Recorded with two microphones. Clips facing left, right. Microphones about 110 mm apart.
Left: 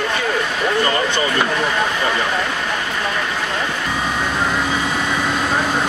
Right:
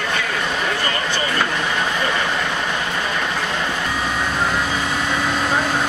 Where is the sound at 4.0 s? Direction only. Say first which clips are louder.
Left 2 dB; centre (ahead or behind).